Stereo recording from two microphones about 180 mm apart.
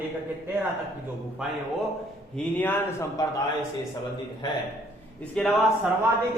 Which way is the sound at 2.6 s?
10° left (ahead or behind).